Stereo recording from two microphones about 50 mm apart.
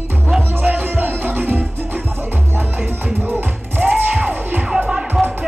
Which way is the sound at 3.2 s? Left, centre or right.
Right.